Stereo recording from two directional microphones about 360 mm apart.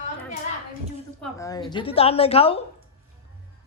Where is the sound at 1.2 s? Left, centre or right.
Centre.